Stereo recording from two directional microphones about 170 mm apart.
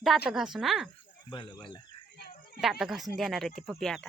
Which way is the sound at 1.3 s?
25° left (ahead or behind).